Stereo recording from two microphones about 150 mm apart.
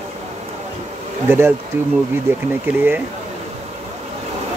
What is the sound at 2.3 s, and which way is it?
Speech, 15° right (ahead or behind).